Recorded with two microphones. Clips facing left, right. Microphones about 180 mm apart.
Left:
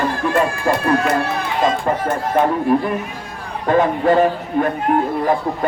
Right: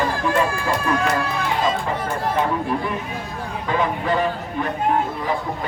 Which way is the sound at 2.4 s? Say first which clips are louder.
Left 7 dB; 55° left (ahead or behind).